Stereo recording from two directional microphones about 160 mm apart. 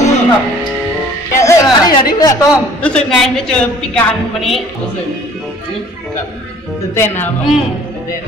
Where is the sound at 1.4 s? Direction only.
20° left (ahead or behind).